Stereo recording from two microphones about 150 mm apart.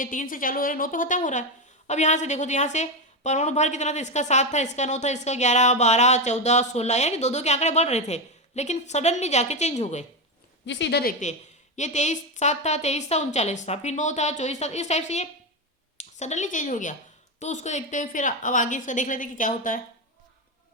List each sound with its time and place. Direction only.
0.0 s a woman's voice: 65° left (ahead or behind)
11.2 s a woman's voice: 55° left (ahead or behind)